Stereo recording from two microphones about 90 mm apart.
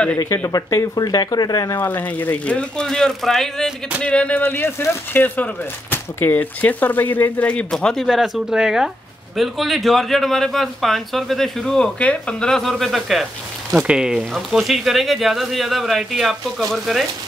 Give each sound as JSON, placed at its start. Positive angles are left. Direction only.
{"t": 0.5, "sound": "speech", "side_deg": 40}
{"t": 1.8, "sound": "speech", "side_deg": 20}
{"t": 4.0, "sound": "speech", "side_deg": 15}